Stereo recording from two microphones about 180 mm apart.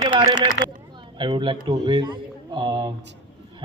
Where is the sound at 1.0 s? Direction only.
25° right (ahead or behind).